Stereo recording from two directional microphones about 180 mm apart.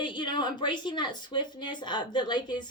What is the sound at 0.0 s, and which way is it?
Speech, 25° left (ahead or behind).